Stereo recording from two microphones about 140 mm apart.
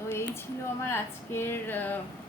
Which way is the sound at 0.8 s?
15° left (ahead or behind).